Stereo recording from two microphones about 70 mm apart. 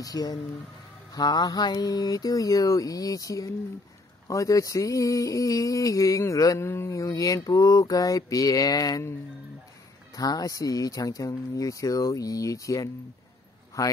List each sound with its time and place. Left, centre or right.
0.0 s speech: left
1.1 s speech: left
4.3 s a sound: left
6.7 s speech: left
10.1 s speech: left
13.8 s a sound: left